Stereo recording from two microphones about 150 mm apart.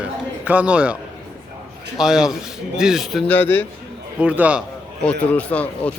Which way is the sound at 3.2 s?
10° left (ahead or behind).